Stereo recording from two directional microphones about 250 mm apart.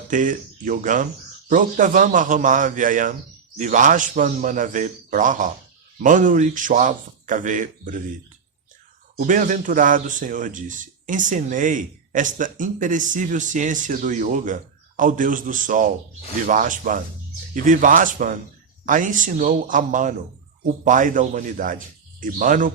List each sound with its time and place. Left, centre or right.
0.1 s speech: right
9.1 s speech: right